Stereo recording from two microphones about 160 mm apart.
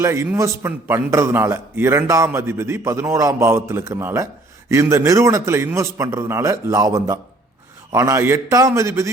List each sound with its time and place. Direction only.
0.0 s a man's voice: 15° right (ahead or behind)